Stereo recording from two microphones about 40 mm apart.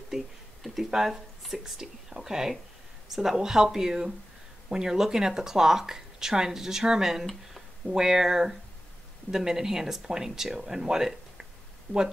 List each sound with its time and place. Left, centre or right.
0.6 s a sound: centre
0.8 s speech: centre
11.9 s speech: left